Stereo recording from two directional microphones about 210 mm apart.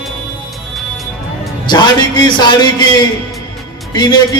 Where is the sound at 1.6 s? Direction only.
20° left (ahead or behind).